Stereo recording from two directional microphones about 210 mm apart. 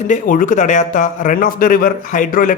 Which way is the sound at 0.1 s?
40° left (ahead or behind).